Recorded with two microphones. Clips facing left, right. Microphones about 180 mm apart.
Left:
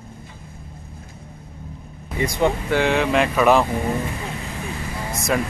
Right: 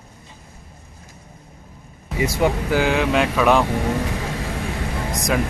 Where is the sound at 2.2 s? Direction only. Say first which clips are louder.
Right 1 dB; 5° right (ahead or behind).